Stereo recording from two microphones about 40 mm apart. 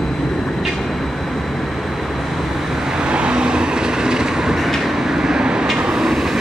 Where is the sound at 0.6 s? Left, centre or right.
Centre.